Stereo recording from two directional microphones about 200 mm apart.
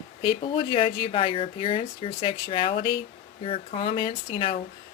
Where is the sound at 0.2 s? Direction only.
25° left (ahead or behind).